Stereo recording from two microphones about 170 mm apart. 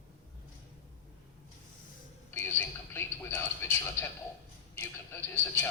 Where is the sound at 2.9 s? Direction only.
15° left (ahead or behind).